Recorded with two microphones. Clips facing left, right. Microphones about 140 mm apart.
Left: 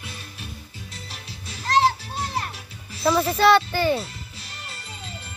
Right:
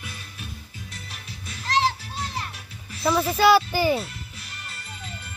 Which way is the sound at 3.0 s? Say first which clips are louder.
Left 1 dB; centre (ahead or behind).